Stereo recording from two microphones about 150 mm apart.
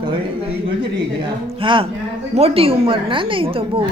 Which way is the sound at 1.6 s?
35° right (ahead or behind).